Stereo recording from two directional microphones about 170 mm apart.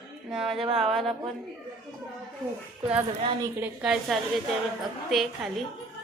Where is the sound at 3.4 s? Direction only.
10° right (ahead or behind).